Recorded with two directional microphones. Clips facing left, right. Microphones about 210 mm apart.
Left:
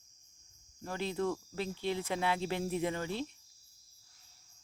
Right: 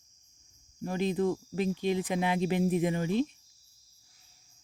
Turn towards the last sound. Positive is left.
turn(degrees=-15)  # may be behind; listen again after turning